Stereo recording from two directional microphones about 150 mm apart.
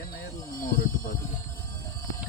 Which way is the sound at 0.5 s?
70° left (ahead or behind).